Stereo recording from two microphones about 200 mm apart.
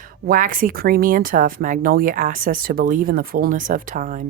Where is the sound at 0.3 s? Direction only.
45° right (ahead or behind).